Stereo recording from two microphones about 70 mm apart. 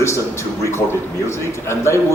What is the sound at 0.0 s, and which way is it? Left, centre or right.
A man's voice, left.